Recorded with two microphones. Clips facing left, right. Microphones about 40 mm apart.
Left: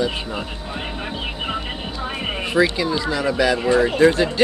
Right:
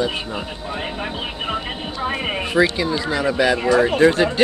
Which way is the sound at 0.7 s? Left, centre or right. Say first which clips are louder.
Right 2 dB; centre.